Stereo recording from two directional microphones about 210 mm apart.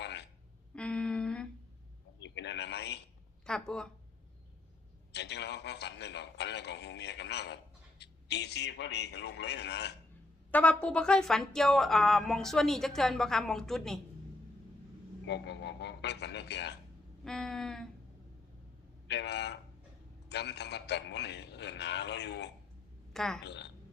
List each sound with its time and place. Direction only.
0.0 s a sound: 55° left (ahead or behind)
0.8 s a sound: 5° left (ahead or behind)
2.2 s a sound: 55° left (ahead or behind)
3.4 s a woman's voice: 5° left (ahead or behind)
5.1 s a man's voice: 55° left (ahead or behind)
10.5 s a woman's voice: 5° left (ahead or behind)
15.3 s a man's voice: 55° left (ahead or behind)
17.2 s a woman's voice: centre (ahead or behind)
19.0 s a man's voice: 55° left (ahead or behind)
23.1 s a woman's voice: centre (ahead or behind)
23.4 s speech: 55° left (ahead or behind)